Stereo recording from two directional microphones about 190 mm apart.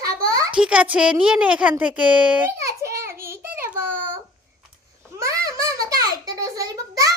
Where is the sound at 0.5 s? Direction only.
5° right (ahead or behind).